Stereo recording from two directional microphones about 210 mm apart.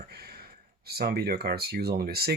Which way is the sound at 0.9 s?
50° right (ahead or behind).